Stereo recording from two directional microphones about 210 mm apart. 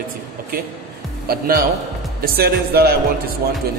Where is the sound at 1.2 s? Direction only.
45° right (ahead or behind).